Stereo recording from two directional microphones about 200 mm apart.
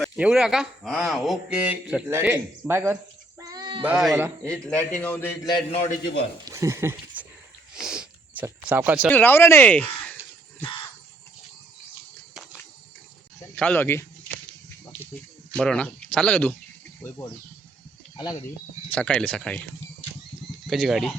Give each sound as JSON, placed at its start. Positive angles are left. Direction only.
{"t": 0.0, "sound": "a man's voice", "side_deg": -5}
{"t": 3.4, "sound": "a sound", "side_deg": -20}
{"t": 3.8, "sound": "a man's voice", "side_deg": -5}
{"t": 4.4, "sound": "a man's voice", "side_deg": 5}
{"t": 6.4, "sound": "speech", "side_deg": -15}
{"t": 7.8, "sound": "a sound", "side_deg": -5}
{"t": 9.0, "sound": "a man's voice", "side_deg": 10}
{"t": 13.6, "sound": "a man's voice", "side_deg": 10}
{"t": 15.5, "sound": "a man's voice", "side_deg": 5}
{"t": 18.9, "sound": "a man's voice", "side_deg": 5}
{"t": 20.7, "sound": "a man's voice", "side_deg": 0}